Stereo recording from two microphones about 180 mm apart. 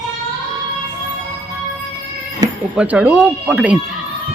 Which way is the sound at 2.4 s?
20° right (ahead or behind).